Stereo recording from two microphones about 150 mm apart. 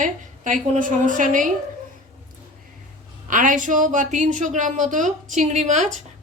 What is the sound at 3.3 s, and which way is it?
A woman's voice, 60° right (ahead or behind).